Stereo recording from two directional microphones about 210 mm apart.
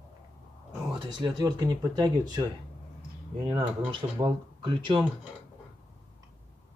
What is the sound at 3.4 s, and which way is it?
Speech, 20° right (ahead or behind).